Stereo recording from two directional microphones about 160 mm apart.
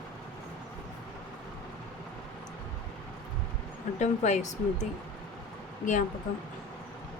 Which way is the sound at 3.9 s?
45° left (ahead or behind).